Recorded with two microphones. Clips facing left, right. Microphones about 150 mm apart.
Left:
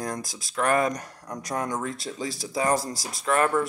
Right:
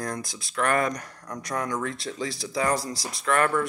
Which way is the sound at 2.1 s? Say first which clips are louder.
Right 1 dB; 40° left (ahead or behind).